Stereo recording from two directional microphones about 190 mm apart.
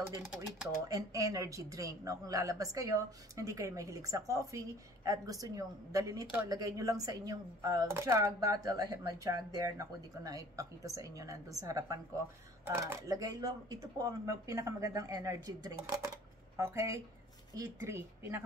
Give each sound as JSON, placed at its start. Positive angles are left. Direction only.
{"t": 0.0, "sound": "speech", "side_deg": -15}